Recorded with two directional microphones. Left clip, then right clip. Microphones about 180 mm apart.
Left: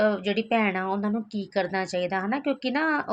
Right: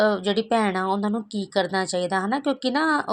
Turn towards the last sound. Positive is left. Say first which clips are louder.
# right 3 dB
turn(degrees=-35)  # may be behind; listen again after turning